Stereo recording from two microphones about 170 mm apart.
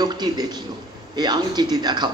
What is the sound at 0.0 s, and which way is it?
A man's voice, 25° right (ahead or behind).